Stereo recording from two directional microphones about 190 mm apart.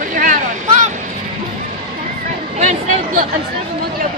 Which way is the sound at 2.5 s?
40° right (ahead or behind).